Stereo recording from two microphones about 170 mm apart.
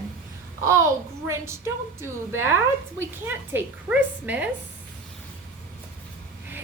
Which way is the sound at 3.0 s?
10° right (ahead or behind).